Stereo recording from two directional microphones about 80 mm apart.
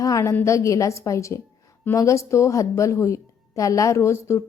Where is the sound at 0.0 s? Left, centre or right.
Left.